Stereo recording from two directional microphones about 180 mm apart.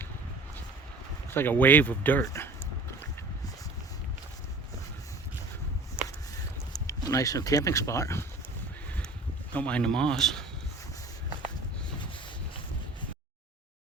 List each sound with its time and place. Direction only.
1.3 s speech: 10° left (ahead or behind)
6.8 s speech: 20° left (ahead or behind)
9.5 s speech: 5° left (ahead or behind)